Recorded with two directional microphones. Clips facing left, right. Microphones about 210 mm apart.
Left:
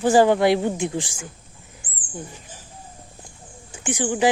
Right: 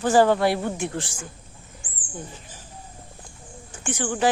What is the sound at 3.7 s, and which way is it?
Speech, 15° left (ahead or behind).